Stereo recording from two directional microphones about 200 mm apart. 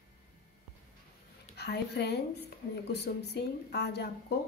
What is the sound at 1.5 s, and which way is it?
A woman's voice, 55° left (ahead or behind).